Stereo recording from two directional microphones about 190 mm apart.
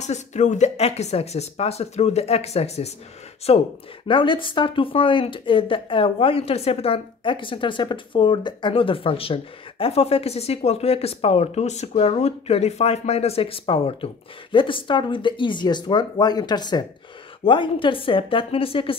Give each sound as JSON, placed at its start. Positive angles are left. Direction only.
{"t": 0.0, "sound": "speech", "side_deg": 35}